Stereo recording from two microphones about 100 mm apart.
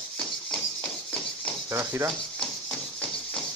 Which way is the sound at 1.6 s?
25° right (ahead or behind).